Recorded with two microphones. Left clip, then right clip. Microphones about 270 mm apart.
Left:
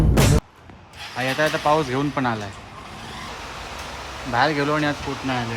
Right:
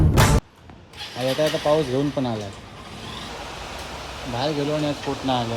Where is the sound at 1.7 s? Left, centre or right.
Centre.